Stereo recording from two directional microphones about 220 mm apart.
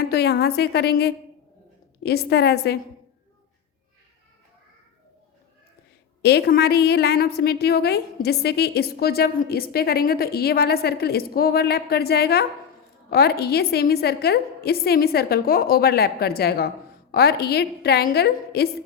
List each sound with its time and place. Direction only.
0.0 s a woman's voice: 45° left (ahead or behind)
6.2 s a woman's voice: 45° left (ahead or behind)